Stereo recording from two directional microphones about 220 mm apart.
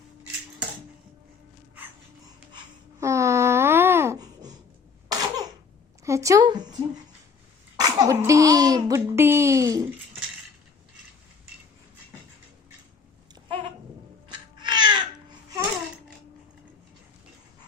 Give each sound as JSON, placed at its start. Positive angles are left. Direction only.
{"t": 3.0, "sound": "babbling", "side_deg": -15}
{"t": 5.0, "sound": "cough", "side_deg": -15}
{"t": 6.1, "sound": "a woman's voice", "side_deg": -15}
{"t": 7.8, "sound": "speech", "side_deg": -15}
{"t": 14.3, "sound": "babbling", "side_deg": -20}